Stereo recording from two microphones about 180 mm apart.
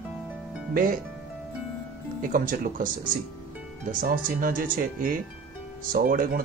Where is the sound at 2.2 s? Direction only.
50° right (ahead or behind).